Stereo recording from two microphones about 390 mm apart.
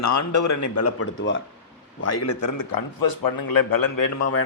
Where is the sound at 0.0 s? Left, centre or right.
Left.